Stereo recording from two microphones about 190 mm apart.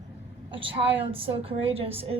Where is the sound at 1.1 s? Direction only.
30° right (ahead or behind).